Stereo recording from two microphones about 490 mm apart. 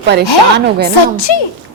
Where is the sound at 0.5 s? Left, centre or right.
Right.